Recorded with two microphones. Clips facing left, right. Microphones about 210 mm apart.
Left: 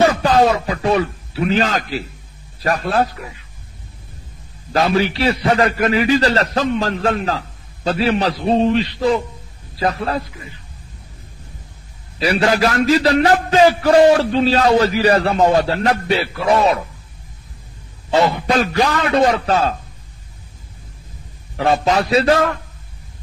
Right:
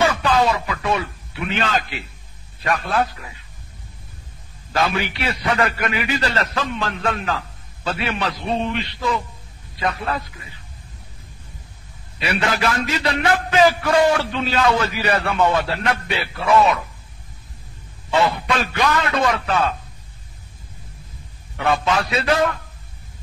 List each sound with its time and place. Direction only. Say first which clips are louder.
0.0 s a man's voice: left 5 dB; 35° left (ahead or behind)
4.7 s a man's voice: left 6 dB; 35° left (ahead or behind)
12.2 s a man's voice: left 6 dB; 35° left (ahead or behind)
18.1 s a man's voice: left 4 dB; 35° left (ahead or behind)
21.5 s a man's voice: left 4 dB; 35° left (ahead or behind)